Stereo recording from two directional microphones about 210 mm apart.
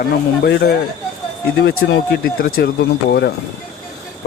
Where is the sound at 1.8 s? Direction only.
55° left (ahead or behind).